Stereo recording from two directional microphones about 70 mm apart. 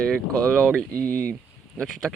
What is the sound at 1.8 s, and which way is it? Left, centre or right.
Speech, centre.